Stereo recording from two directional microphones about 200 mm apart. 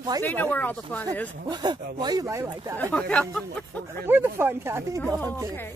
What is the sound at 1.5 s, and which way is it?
Speech, 20° right (ahead or behind).